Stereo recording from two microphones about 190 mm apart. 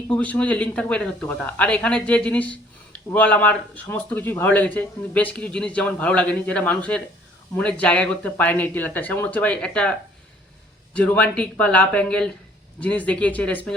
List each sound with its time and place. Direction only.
0.1 s speech: 5° left (ahead or behind)
10.9 s speech: 5° left (ahead or behind)